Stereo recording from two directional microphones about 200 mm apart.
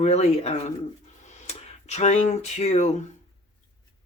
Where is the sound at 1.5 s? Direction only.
35° left (ahead or behind).